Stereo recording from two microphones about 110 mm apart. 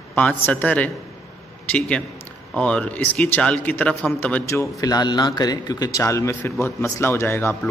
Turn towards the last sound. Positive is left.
turn(degrees=20)  # may be behind; listen again after turning